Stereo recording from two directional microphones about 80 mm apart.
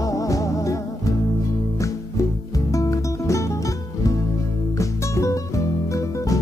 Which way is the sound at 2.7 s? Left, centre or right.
Left.